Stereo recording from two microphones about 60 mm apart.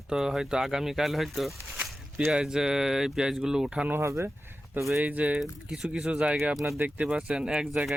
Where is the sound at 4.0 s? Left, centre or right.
Right.